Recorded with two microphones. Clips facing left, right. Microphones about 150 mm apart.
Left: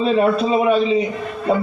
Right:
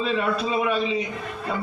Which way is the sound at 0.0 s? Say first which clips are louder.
Left 8 dB; 45° left (ahead or behind).